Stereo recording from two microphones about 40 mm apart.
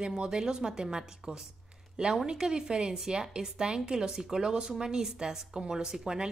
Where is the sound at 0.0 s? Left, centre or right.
Right.